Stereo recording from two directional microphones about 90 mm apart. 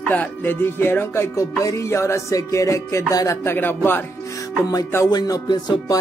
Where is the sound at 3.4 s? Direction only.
25° left (ahead or behind).